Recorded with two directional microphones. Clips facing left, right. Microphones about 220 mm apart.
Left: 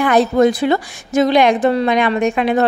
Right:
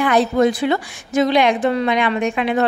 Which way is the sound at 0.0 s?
45° left (ahead or behind).